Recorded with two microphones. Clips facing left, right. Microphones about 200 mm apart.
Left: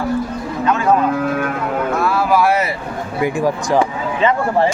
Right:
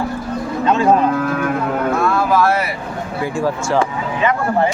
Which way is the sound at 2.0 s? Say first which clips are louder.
Left 1 dB; 10° left (ahead or behind).